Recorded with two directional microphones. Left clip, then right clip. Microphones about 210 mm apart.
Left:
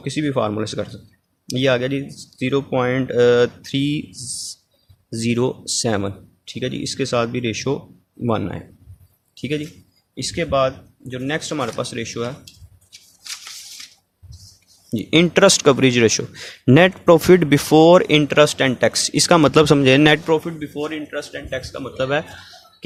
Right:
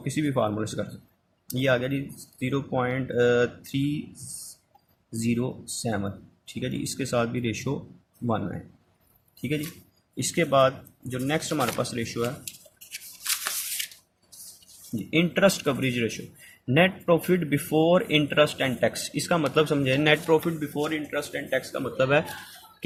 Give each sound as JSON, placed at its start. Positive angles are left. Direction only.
{"t": 0.0, "sound": "speech", "side_deg": 20}
{"t": 5.2, "sound": "speech", "side_deg": 35}
{"t": 6.5, "sound": "speech", "side_deg": 25}
{"t": 9.6, "sound": "a sound", "side_deg": 0}
{"t": 10.3, "sound": "speech", "side_deg": 15}
{"t": 15.1, "sound": "speech", "side_deg": 40}
{"t": 20.7, "sound": "speech", "side_deg": 0}